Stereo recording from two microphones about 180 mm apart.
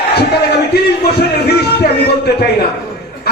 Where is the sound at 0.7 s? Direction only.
65° left (ahead or behind).